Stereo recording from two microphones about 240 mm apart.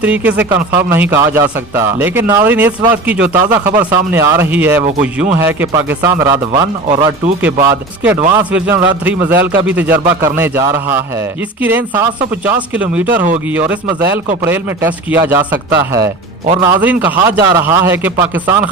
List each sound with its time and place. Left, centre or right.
0.0 s a man's voice: centre
4.8 s speech: right
5.5 s a man's voice: centre
7.4 s a man's voice: centre
16.6 s a man's voice: centre